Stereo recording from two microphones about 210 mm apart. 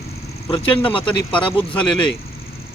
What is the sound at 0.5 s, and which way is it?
Speech, 25° left (ahead or behind).